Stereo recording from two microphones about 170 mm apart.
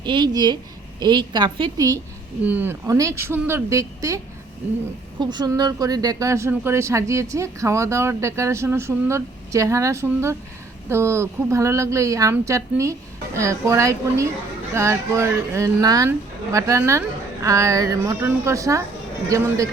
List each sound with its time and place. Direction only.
0.0 s a woman's voice: 25° right (ahead or behind)
2.4 s speech: 10° right (ahead or behind)
5.2 s a woman's voice: 25° right (ahead or behind)